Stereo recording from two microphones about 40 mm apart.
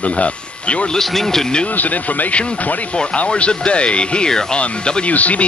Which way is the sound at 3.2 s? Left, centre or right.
Left.